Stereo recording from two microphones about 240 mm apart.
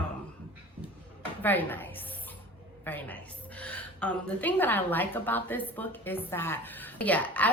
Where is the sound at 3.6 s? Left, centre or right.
Centre.